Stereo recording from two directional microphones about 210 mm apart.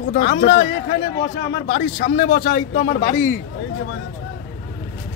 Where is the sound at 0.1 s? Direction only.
45° left (ahead or behind).